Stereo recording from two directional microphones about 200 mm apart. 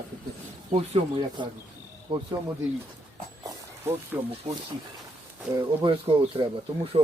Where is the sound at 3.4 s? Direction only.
15° right (ahead or behind).